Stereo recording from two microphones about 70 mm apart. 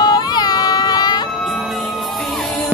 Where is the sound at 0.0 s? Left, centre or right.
Left.